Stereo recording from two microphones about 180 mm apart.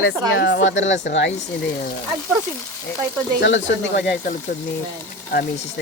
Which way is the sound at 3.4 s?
90° left.